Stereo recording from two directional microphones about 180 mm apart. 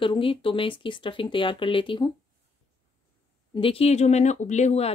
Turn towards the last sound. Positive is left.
turn(degrees=40)  # may be behind; listen again after turning